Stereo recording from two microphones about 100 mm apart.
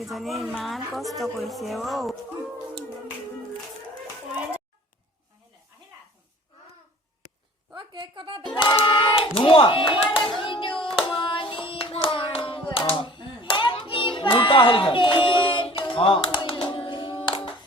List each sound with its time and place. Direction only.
0.0 s a woman's voice: centre (ahead or behind)
7.7 s a sound: 50° right (ahead or behind)
8.5 s hands: 55° left (ahead or behind)